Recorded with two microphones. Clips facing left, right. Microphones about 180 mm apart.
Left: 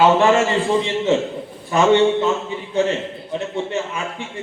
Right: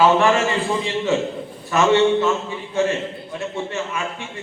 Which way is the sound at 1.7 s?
20° left (ahead or behind).